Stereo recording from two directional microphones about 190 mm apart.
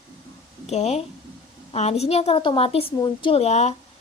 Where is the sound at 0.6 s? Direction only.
35° left (ahead or behind).